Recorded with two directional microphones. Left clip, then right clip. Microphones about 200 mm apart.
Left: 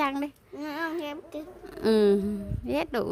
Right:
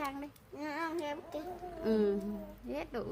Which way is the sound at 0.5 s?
35° left (ahead or behind).